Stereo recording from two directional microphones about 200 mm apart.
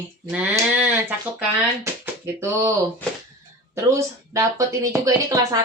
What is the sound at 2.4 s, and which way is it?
Speech, 15° right (ahead or behind).